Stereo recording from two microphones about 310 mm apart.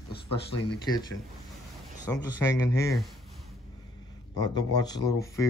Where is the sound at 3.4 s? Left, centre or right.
Centre.